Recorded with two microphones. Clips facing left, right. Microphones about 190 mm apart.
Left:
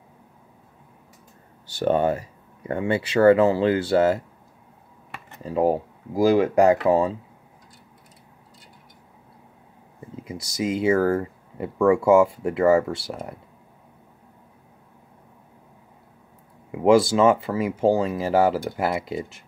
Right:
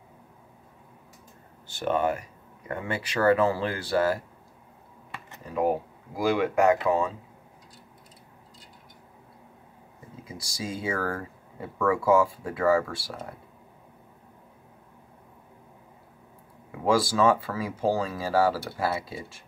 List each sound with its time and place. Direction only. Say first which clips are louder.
1.9 s speech: left 5 dB; 30° left (ahead or behind)
5.4 s speech: left 5 dB; 30° left (ahead or behind)
6.1 s speech: left 6 dB; 40° left (ahead or behind)
10.2 s speech: left 9 dB; 20° left (ahead or behind)
16.8 s speech: left 6 dB; 25° left (ahead or behind)